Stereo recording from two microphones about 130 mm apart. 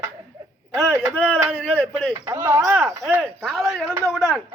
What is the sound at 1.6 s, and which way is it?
Speech, 10° left (ahead or behind).